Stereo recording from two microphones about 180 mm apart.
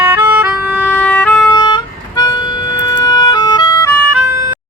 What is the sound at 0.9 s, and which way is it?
Music, 10° left (ahead or behind).